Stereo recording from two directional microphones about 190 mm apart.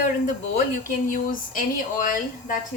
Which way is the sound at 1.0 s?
45° left (ahead or behind).